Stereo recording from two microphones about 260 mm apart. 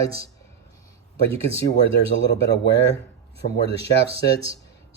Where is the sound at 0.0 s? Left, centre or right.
Centre.